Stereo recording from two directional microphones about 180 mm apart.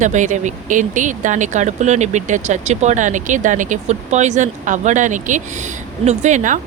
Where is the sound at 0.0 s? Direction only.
45° right (ahead or behind).